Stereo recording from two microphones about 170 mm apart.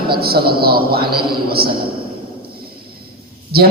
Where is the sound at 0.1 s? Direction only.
65° right (ahead or behind).